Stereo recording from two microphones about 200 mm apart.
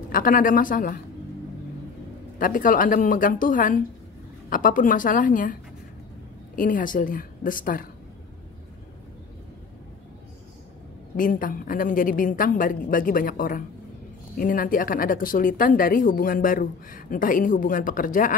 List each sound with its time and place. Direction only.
0.1 s speech: 45° left (ahead or behind)
2.3 s speech: 45° left (ahead or behind)
11.1 s speech: 45° left (ahead or behind)